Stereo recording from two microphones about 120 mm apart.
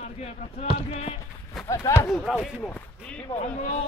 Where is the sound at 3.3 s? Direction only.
65° left (ahead or behind).